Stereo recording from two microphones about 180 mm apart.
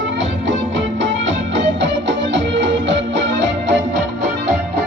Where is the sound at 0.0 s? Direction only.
90° right.